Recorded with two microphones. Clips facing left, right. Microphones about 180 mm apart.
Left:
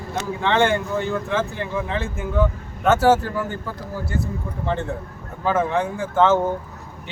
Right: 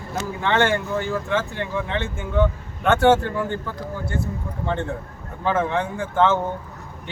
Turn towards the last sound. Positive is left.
turn(degrees=5)  # may be behind; listen again after turning